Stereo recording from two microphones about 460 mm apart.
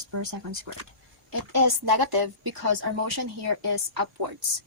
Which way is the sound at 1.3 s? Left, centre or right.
Right.